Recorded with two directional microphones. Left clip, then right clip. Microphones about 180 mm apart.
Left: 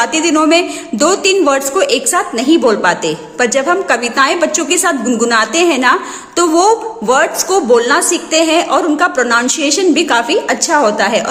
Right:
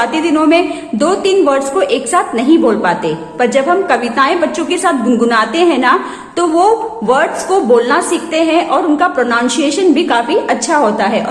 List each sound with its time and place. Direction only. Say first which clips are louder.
0.0 s a woman's voice: even; 20° left (ahead or behind)